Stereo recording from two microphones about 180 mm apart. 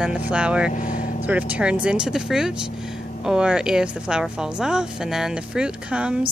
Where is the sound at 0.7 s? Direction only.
45° left (ahead or behind).